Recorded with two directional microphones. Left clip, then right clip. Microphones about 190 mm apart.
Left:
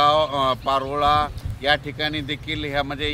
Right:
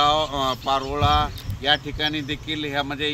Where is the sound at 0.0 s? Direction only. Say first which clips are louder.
Left 2 dB; 25° left (ahead or behind).